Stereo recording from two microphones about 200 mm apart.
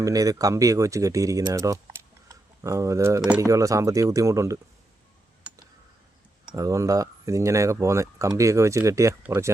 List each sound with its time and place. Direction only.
0.0 s speech: 15° right (ahead or behind)
6.6 s speech: 15° right (ahead or behind)